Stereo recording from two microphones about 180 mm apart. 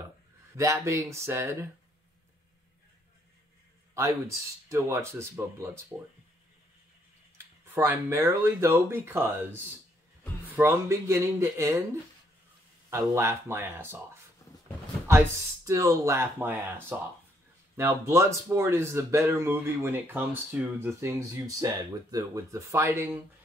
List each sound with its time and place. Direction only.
0.6 s speech: 15° right (ahead or behind)
4.6 s speech: 15° right (ahead or behind)
7.3 s speech: 10° right (ahead or behind)
15.0 s speech: 15° right (ahead or behind)